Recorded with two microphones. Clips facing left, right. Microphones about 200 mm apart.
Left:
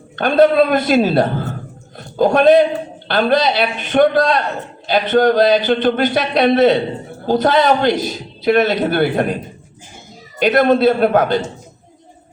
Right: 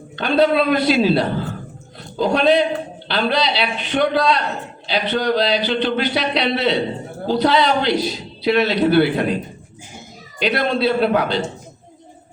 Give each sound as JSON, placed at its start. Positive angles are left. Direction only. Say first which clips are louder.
{"t": 0.2, "sound": "a man's voice", "louder": "left 4 dB", "side_deg": 50}
{"t": 10.4, "sound": "a man's voice", "louder": "left 6 dB", "side_deg": 50}